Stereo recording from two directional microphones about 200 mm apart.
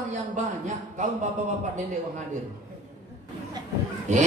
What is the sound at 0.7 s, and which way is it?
Speech, 35° right (ahead or behind).